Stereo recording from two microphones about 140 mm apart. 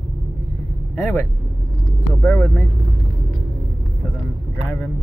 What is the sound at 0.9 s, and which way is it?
Speech, 10° left (ahead or behind).